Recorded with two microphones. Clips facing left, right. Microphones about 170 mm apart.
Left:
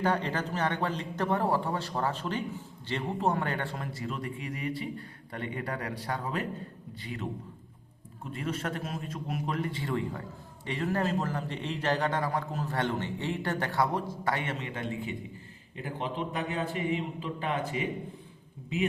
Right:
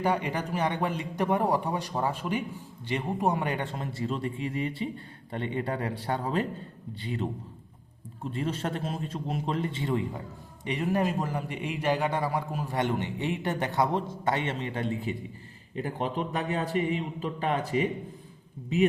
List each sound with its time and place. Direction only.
0.0 s a man's voice: 10° right (ahead or behind); by 17.8 s 35° right (ahead or behind)